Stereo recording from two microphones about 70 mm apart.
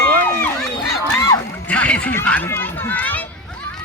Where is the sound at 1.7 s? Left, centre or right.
Centre.